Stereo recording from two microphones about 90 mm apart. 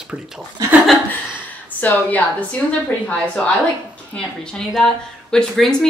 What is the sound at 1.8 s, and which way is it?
A woman's voice, 20° left (ahead or behind).